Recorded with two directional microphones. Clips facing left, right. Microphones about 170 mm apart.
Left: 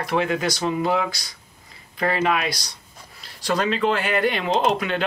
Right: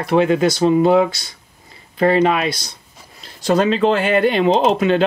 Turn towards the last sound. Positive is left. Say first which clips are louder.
# right 6 dB
turn(degrees=-25)  # may be behind; listen again after turning